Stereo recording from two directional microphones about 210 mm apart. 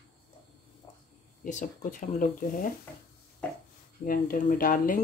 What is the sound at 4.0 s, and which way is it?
Speech, 40° left (ahead or behind).